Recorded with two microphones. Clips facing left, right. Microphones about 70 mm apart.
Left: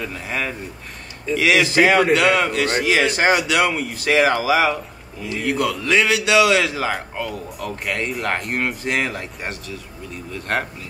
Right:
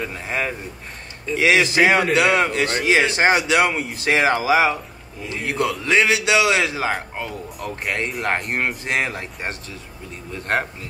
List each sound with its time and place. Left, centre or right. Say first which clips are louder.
0.0 s a man's voice: right 1 dB; right